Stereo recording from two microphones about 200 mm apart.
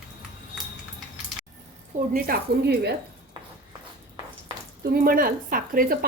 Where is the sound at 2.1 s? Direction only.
50° right (ahead or behind).